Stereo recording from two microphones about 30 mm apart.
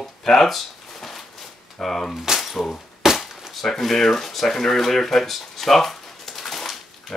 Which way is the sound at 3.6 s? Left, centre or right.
Centre.